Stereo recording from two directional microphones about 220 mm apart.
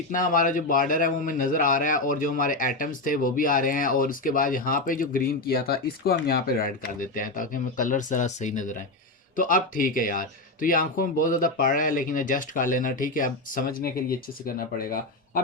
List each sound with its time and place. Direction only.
0.1 s a man's voice: 40° left (ahead or behind)